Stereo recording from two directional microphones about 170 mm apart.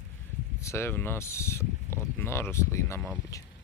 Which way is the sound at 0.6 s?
15° left (ahead or behind).